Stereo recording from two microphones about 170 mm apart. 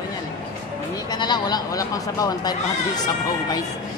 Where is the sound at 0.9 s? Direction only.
25° left (ahead or behind).